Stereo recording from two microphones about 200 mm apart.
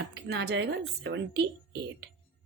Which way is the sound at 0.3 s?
60° right (ahead or behind).